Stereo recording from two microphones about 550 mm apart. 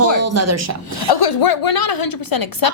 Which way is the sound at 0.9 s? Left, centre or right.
Left.